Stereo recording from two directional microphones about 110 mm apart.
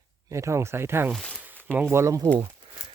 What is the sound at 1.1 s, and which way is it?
Speech, 10° left (ahead or behind).